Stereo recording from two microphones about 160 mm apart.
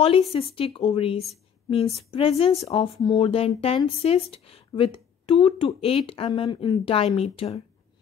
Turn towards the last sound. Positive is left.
turn(degrees=40)  # may be behind; listen again after turning